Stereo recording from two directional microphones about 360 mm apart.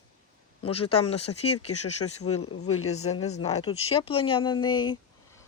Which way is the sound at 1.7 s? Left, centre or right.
Left.